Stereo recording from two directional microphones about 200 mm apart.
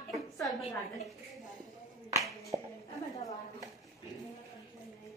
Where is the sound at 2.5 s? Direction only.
30° right (ahead or behind).